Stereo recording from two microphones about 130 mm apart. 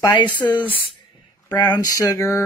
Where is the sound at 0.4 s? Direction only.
15° left (ahead or behind).